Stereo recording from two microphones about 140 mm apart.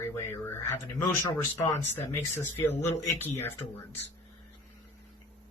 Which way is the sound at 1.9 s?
15° left (ahead or behind).